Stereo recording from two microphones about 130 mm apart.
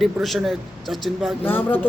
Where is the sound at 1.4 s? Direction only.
15° left (ahead or behind).